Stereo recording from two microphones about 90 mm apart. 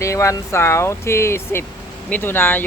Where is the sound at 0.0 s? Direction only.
35° left (ahead or behind).